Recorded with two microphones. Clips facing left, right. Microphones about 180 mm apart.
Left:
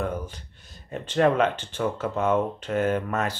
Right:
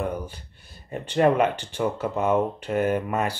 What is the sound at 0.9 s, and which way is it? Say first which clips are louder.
Speech: right 1 dB; 10° right (ahead or behind).